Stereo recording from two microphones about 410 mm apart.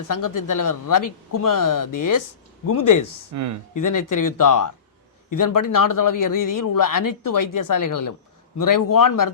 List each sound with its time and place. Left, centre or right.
0.1 s speech: left
3.3 s speech: right
3.8 s speech: left